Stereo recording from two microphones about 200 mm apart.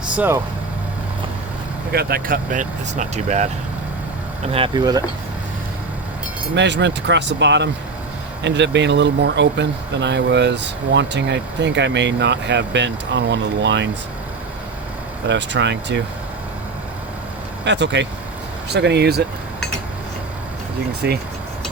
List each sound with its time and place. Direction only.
1.9 s speech: 50° right (ahead or behind)
4.5 s speech: 25° right (ahead or behind)
6.6 s speech: 60° right (ahead or behind)
15.3 s speech: 60° right (ahead or behind)
17.7 s speech: 60° right (ahead or behind)
21.0 s speech: 55° right (ahead or behind)